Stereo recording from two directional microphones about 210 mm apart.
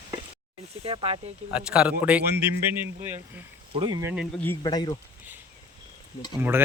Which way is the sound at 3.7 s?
20° right (ahead or behind).